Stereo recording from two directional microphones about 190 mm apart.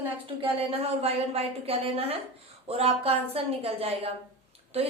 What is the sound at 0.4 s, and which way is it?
A woman's voice, 30° right (ahead or behind).